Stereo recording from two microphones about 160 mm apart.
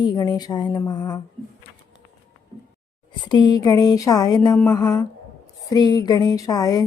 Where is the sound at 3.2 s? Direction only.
25° left (ahead or behind).